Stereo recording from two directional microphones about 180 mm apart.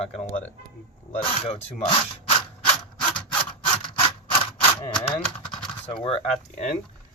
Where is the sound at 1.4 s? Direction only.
35° left (ahead or behind).